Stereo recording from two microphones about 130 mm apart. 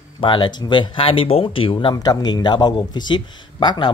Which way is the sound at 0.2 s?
40° left (ahead or behind).